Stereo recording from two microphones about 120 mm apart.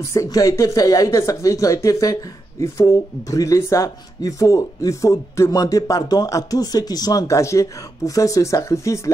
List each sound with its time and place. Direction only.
0.0 s speech: 25° left (ahead or behind)